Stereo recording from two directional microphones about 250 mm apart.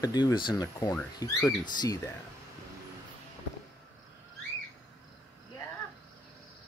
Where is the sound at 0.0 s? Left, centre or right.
Centre.